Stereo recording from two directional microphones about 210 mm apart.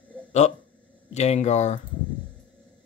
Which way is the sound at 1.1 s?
30° left (ahead or behind).